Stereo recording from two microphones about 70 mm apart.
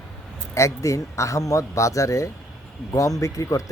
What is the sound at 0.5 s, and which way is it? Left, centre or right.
Speech, left.